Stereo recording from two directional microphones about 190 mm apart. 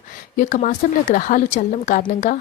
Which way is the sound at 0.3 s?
40° left (ahead or behind).